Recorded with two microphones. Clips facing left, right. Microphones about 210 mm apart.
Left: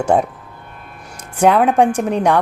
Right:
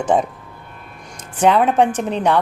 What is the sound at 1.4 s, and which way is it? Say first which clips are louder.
Speech: left 2 dB; 10° left (ahead or behind).